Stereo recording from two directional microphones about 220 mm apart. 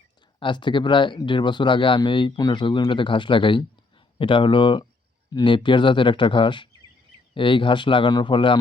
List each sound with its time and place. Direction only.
0.3 s speech: 20° left (ahead or behind)